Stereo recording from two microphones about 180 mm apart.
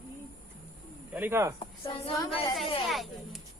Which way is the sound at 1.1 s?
10° right (ahead or behind).